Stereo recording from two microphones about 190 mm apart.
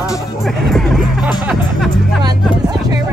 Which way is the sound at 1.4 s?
5° right (ahead or behind).